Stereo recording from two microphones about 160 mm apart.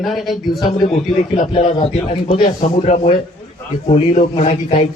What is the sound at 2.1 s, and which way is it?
A man's voice, 50° left (ahead or behind).